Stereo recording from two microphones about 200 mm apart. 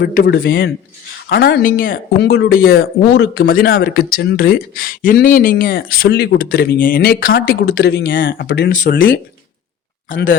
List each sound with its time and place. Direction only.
0.0 s speech: 50° left (ahead or behind)
8.7 s speech: 45° left (ahead or behind)